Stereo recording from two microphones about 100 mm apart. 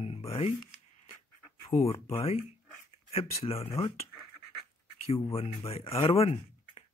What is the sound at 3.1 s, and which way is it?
Speech, 90° left.